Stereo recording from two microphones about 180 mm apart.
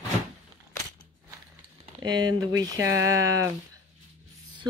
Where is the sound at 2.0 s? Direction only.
25° right (ahead or behind).